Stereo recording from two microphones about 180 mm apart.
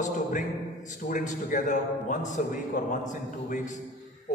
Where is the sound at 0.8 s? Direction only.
45° left (ahead or behind).